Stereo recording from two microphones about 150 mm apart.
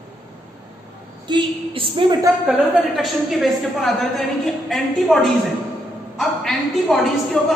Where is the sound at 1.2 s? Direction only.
35° right (ahead or behind).